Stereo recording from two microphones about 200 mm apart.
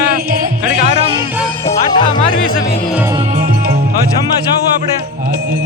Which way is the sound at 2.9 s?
10° right (ahead or behind).